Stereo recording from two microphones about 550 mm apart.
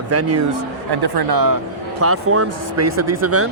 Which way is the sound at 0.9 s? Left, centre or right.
Right.